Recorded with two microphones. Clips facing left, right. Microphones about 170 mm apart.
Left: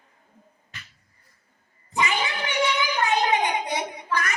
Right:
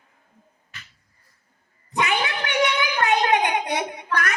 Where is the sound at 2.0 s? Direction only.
60° right (ahead or behind).